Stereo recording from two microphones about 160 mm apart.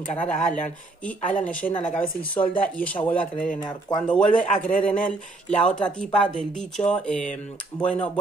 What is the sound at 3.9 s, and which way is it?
Speech, 25° left (ahead or behind).